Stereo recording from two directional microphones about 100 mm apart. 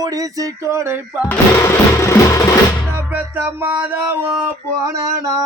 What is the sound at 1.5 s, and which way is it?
Music, 30° left (ahead or behind).